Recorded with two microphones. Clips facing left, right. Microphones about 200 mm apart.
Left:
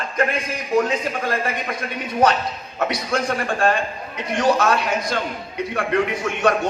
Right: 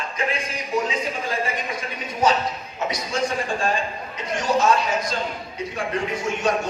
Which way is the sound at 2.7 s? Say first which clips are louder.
Left 3 dB; 65° left (ahead or behind).